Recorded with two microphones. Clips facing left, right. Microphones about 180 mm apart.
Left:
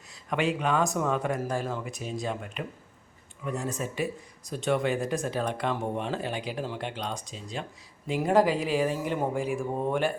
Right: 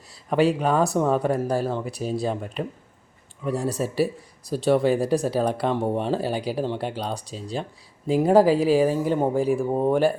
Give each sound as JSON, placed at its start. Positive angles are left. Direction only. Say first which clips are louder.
{"t": 0.1, "sound": "speech", "louder": "right 7 dB", "side_deg": -35}